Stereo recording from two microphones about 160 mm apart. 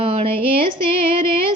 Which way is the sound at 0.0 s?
40° right (ahead or behind).